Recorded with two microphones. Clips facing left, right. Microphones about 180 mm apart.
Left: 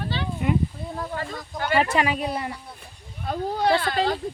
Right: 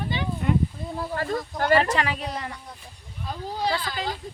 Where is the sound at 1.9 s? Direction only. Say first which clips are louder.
Left 4 dB; 15° left (ahead or behind).